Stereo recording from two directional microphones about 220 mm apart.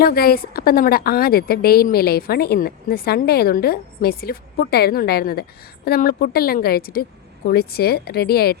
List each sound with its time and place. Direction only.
0.0 s a woman's voice: 45° left (ahead or behind)